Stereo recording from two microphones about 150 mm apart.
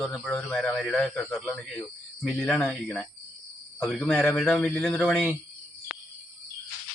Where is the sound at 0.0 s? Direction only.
5° left (ahead or behind).